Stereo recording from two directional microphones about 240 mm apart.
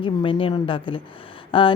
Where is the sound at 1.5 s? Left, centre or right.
Left.